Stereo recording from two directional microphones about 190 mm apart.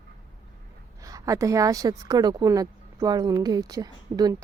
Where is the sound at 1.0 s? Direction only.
20° right (ahead or behind).